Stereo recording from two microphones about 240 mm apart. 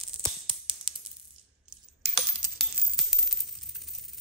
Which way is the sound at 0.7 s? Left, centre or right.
Right.